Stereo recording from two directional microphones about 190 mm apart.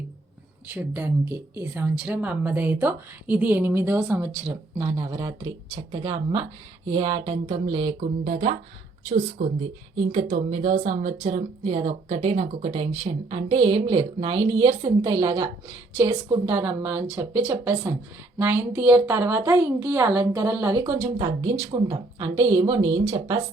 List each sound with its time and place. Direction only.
0.7 s a woman's voice: 10° right (ahead or behind); by 23.4 s 25° right (ahead or behind)